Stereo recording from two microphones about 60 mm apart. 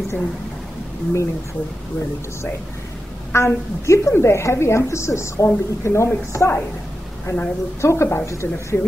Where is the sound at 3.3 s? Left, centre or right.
Left.